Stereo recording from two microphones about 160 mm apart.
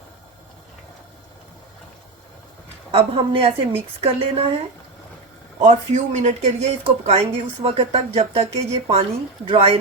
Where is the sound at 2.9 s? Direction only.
35° right (ahead or behind).